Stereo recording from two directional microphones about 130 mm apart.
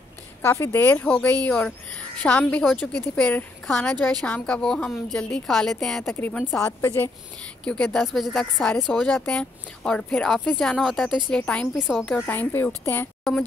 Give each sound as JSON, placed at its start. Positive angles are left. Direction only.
{"t": 0.4, "sound": "speech", "side_deg": 20}
{"t": 7.6, "sound": "speech", "side_deg": 5}
{"t": 11.2, "sound": "speech", "side_deg": 10}